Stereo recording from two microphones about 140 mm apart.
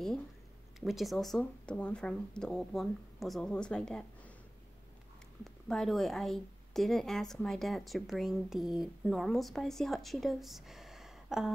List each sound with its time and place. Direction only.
0.7 s a woman's voice: centre (ahead or behind)
5.4 s a woman's voice: centre (ahead or behind)